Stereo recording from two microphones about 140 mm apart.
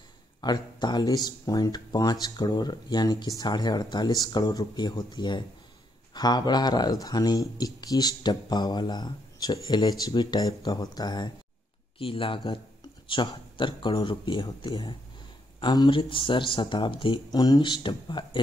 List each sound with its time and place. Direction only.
0.4 s speech: 30° left (ahead or behind)
12.0 s speech: 40° left (ahead or behind)